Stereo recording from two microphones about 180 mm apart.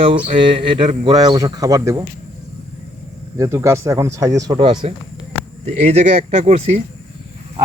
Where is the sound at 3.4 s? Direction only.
15° right (ahead or behind); by 6.8 s 35° right (ahead or behind).